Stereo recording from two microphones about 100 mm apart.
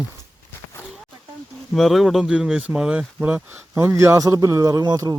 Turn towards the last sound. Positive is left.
turn(degrees=-40)  # may be behind; listen again after turning